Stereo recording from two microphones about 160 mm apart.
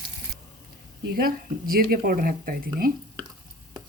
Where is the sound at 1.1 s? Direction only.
65° right (ahead or behind).